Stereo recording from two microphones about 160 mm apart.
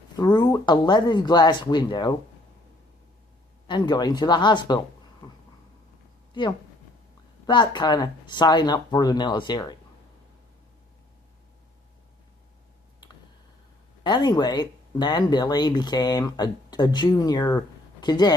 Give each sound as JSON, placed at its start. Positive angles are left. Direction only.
{"t": 0.2, "sound": "speech", "side_deg": 25}
{"t": 3.7, "sound": "speech", "side_deg": 25}
{"t": 5.2, "sound": "a sound", "side_deg": 30}
{"t": 6.3, "sound": "speech", "side_deg": 30}
{"t": 14.0, "sound": "speech", "side_deg": 25}